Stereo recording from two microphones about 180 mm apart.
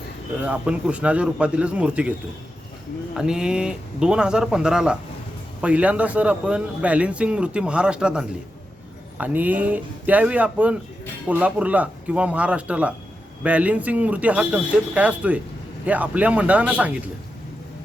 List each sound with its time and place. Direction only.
0.4 s speech: 5° right (ahead or behind)
3.2 s speech: 5° right (ahead or behind)